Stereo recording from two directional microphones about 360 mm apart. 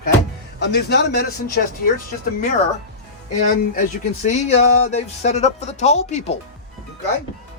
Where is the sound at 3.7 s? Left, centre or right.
Left.